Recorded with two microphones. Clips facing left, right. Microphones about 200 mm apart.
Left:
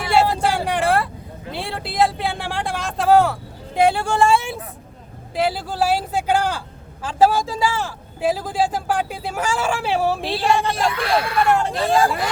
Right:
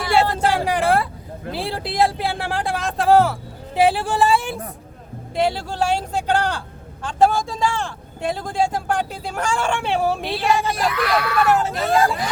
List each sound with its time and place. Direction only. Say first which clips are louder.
0.4 s vehicle: right 1 dB; centre (ahead or behind)
1.5 s a sound: even; centre (ahead or behind)
3.8 s speech: even; 5° right (ahead or behind)
10.8 s speech: left 1 dB; 25° left (ahead or behind)
11.5 s speech: even; 5° right (ahead or behind)